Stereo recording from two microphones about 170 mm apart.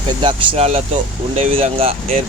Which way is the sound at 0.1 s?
30° right (ahead or behind).